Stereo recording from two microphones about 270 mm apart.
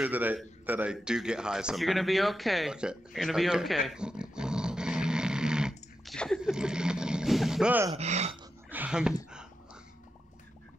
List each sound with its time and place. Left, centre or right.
0.0 s a man's voice: centre
7.9 s speech: right
8.6 s speech: centre